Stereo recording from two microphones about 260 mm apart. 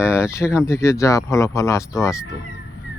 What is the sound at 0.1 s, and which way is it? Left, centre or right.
Speech, centre.